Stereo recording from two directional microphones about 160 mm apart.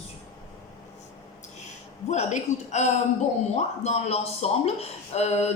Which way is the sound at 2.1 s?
45° left (ahead or behind).